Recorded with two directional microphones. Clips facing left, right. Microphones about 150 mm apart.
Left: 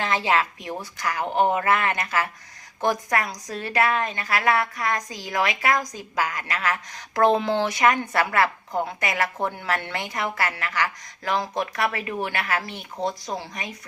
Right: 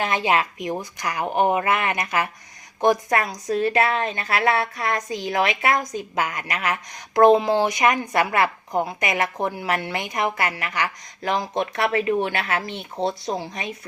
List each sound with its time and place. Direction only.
0.0 s a woman's voice: 15° right (ahead or behind)